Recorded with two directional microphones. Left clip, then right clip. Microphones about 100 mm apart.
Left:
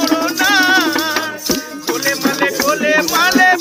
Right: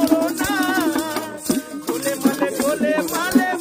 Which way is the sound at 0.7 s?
70° right (ahead or behind).